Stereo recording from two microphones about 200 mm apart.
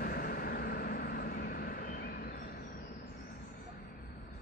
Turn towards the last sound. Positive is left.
turn(degrees=45)  # may be behind; listen again after turning